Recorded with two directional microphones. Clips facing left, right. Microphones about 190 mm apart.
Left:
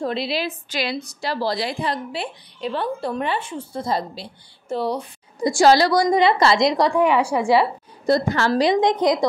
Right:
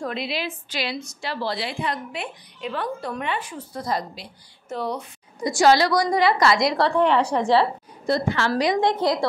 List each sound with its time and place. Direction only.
0.0 s a woman's voice: 30° left (ahead or behind)
6.0 s a woman's voice: 20° left (ahead or behind)
8.1 s a woman's voice: 40° left (ahead or behind)
8.6 s a woman's voice: 20° left (ahead or behind)